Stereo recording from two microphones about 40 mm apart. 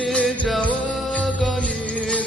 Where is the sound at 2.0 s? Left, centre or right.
Left.